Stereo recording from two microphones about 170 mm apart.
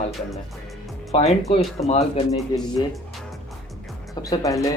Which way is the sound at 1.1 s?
40° left (ahead or behind).